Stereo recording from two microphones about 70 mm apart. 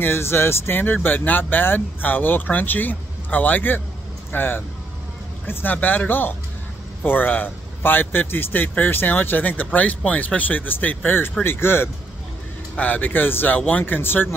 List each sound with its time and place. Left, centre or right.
0.0 s speech: left
12.7 s speech: left